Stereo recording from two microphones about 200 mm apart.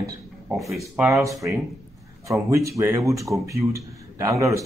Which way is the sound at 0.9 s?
15° right (ahead or behind).